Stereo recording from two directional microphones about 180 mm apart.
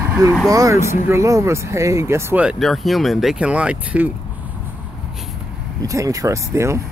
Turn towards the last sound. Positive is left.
turn(degrees=-15)  # may be behind; listen again after turning